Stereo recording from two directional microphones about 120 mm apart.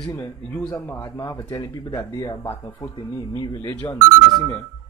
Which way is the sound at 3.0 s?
45° left (ahead or behind).